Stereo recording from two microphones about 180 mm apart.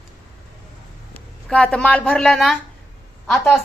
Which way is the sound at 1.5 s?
5° left (ahead or behind).